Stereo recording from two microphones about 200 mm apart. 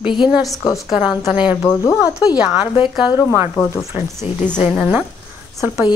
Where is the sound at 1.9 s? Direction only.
5° right (ahead or behind).